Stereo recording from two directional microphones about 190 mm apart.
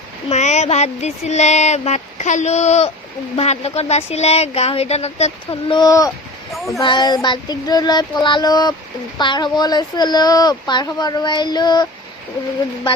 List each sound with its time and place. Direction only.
0.3 s speech: 35° left (ahead or behind); by 6.1 s 20° left (ahead or behind)
6.5 s a sound: centre (ahead or behind)
6.7 s speech: 20° left (ahead or behind)